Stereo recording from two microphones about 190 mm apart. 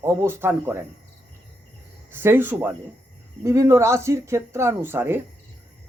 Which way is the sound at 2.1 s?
10° right (ahead or behind).